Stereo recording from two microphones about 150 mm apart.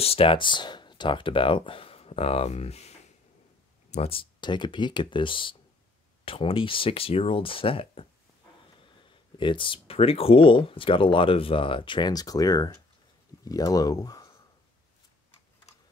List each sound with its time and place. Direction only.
0.0 s speech: 40° left (ahead or behind)
3.9 s speech: 40° left (ahead or behind)
9.4 s speech: 35° left (ahead or behind)